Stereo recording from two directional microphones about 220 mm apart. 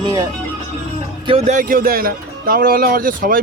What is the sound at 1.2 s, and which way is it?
Speech, 30° right (ahead or behind).